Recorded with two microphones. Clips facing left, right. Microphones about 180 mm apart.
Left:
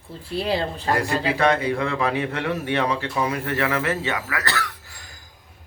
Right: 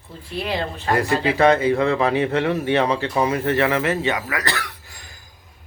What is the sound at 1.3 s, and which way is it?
Speech, 25° right (ahead or behind).